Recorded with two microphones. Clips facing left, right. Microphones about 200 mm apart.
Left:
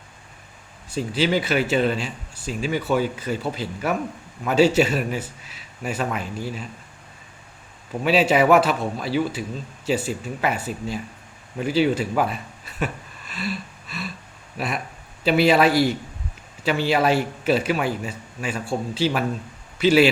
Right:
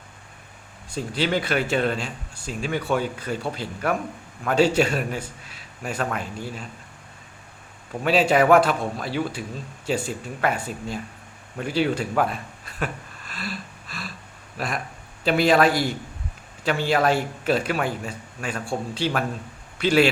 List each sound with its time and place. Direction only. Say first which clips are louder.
0.9 s a man's voice: left 3 dB; 5° left (ahead or behind)
8.0 s a man's voice: left 1 dB; 5° left (ahead or behind)
15.2 s a man's voice: left 1 dB; 5° left (ahead or behind)
15.6 s a man's voice: left 3 dB; 50° right (ahead or behind)
16.6 s a man's voice: left 1 dB; 5° left (ahead or behind)